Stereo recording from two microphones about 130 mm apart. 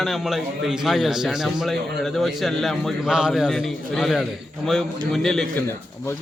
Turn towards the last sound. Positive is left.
turn(degrees=5)  # may be behind; listen again after turning